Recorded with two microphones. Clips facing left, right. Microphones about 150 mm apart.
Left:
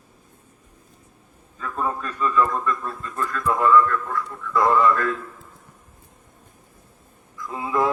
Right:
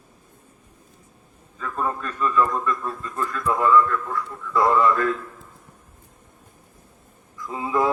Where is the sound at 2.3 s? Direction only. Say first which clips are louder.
Even; 10° right (ahead or behind).